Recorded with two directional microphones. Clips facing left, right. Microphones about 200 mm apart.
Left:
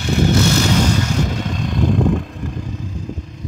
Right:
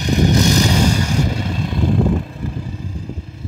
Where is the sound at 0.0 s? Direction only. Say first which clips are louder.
Right 1 dB; 15° right (ahead or behind).